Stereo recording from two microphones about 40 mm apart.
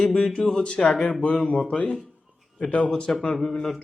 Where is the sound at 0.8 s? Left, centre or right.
Centre.